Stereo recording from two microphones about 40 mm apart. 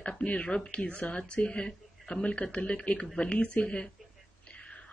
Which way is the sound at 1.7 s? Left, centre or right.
Left.